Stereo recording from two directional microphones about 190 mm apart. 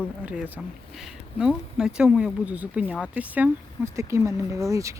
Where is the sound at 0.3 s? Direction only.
10° right (ahead or behind).